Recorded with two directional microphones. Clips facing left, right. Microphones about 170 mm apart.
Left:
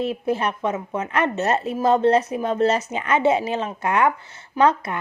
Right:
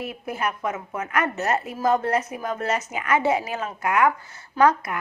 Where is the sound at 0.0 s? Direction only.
30° left (ahead or behind).